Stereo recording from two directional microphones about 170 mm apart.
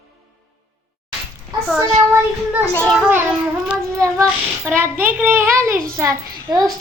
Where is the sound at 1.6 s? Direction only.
Centre (ahead or behind).